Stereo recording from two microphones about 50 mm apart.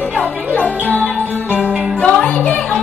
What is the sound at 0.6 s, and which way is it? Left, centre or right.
Music, left.